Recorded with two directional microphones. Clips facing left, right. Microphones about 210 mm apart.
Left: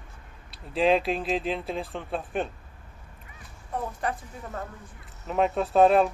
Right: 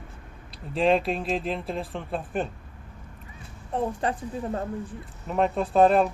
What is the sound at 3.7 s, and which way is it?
Speech, 30° right (ahead or behind).